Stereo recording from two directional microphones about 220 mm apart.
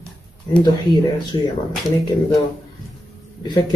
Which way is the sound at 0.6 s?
20° left (ahead or behind).